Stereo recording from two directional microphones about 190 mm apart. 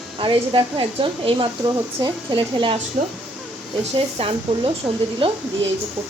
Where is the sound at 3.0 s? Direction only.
45° right (ahead or behind).